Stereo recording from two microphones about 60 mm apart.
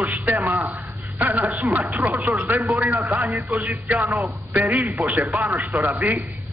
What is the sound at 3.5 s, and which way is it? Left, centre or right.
A man's voice, right.